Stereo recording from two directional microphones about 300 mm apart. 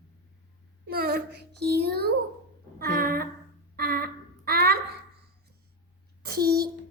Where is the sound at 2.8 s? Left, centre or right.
Right.